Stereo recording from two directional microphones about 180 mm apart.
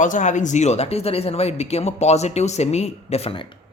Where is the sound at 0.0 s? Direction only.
45° left (ahead or behind).